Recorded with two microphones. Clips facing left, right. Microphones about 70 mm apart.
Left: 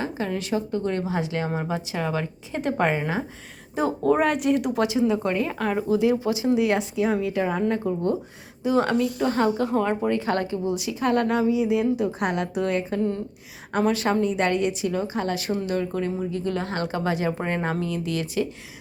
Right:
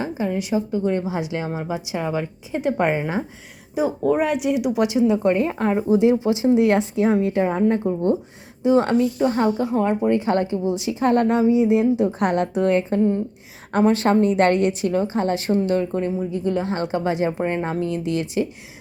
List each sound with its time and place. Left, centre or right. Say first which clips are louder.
0.2 s speech: right 5 dB; centre
12.2 s a woman's voice: right 5 dB; right
13.0 s speech: right 6 dB; right
13.7 s speech: right 5 dB; right
15.1 s speech: right 5 dB; right